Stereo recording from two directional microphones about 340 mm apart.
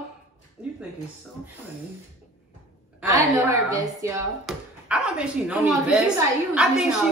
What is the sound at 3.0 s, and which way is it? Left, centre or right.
Speech, centre.